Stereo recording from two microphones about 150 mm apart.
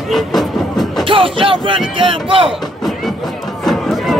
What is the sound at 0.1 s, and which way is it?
Vehicle, centre (ahead or behind).